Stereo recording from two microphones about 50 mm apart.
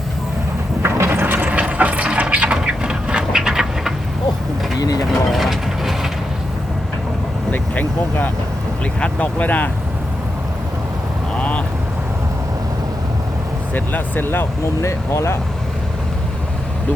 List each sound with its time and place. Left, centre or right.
0.8 s a sound: right
1.2 s a sound: right; by 3.9 s centre
5.2 s train: centre
7.5 s vehicle: left
8.8 s speech: left
11.3 s vehicle: left
13.7 s speech: left
14.8 s speech: left